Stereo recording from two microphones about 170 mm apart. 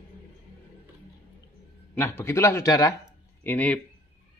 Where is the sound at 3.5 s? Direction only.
10° left (ahead or behind).